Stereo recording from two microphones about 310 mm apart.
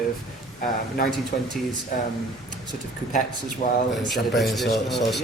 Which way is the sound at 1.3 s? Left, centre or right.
Left.